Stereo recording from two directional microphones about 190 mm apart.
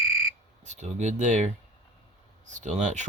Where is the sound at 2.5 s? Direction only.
40° right (ahead or behind).